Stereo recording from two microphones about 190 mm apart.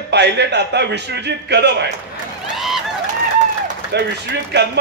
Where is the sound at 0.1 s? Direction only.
65° right (ahead or behind).